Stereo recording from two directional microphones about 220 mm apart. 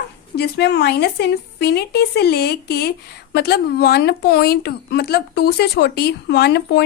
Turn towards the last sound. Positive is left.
turn(degrees=50)  # may be behind; listen again after turning